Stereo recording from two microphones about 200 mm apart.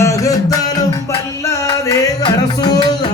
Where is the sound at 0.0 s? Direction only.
15° left (ahead or behind).